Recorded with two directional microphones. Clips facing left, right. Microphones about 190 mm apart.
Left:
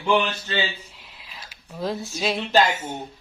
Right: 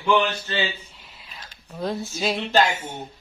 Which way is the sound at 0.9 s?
Centre (ahead or behind).